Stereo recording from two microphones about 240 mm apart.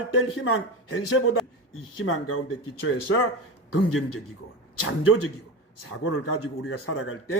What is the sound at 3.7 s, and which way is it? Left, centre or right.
Speech, left.